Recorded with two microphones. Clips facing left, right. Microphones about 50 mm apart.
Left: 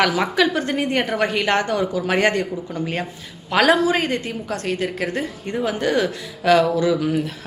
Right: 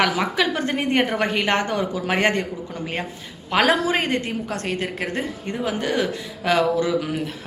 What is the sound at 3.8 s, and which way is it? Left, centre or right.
Speech, right.